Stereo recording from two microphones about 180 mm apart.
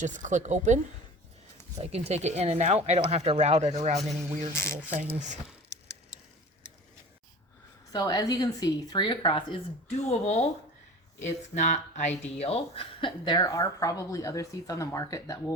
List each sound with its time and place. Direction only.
0.0 s speech: 45° right (ahead or behind)
1.8 s speech: 35° right (ahead or behind)
4.5 s speech: 15° left (ahead or behind)
7.9 s speech: 20° left (ahead or behind); by 10.4 s 35° left (ahead or behind)
11.5 s speech: 40° left (ahead or behind); by 15.5 s 15° left (ahead or behind)